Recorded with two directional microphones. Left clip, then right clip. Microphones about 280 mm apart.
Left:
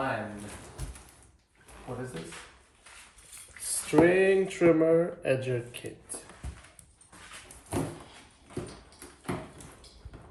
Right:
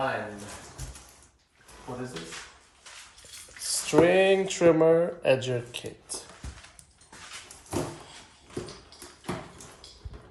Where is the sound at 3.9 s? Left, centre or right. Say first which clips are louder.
Right 2 dB; right.